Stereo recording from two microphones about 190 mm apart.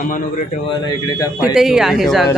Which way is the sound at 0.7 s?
20° left (ahead or behind).